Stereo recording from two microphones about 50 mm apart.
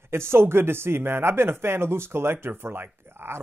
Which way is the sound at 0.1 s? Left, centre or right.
Right.